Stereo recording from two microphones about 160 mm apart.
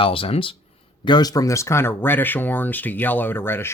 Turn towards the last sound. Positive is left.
turn(degrees=10)  # may be behind; listen again after turning